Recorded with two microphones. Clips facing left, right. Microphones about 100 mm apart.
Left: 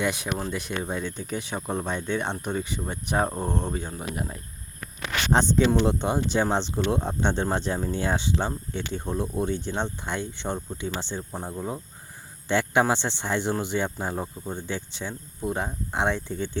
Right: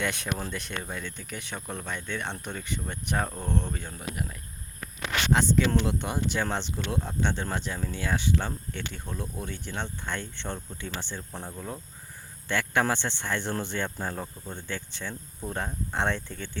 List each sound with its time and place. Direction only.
0.0 s speech: 15° left (ahead or behind)
5.5 s speech: 25° left (ahead or behind)